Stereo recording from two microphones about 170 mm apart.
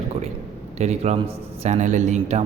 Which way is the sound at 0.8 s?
40° right (ahead or behind).